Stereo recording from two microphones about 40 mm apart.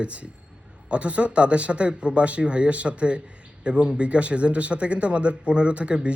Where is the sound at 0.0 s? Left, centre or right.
Right.